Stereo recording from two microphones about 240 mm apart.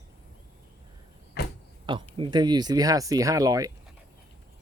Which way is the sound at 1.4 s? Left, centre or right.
Left.